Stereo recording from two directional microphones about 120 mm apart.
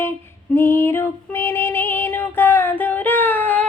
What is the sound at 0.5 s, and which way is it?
Female singing, 20° left (ahead or behind).